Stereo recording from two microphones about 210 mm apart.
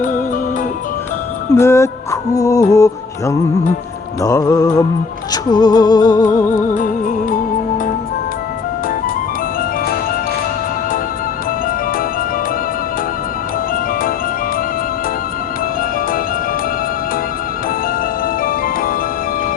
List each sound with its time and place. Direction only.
1.5 s music: 15° left (ahead or behind)
6.2 s music: 40° left (ahead or behind)
18.4 s music: 40° left (ahead or behind)